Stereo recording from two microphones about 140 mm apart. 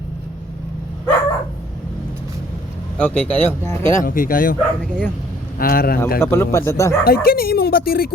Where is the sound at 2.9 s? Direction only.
10° left (ahead or behind).